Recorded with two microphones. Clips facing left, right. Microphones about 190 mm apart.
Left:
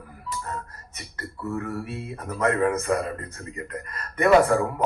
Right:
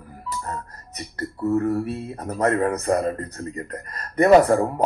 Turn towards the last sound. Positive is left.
turn(degrees=-40)  # may be behind; listen again after turning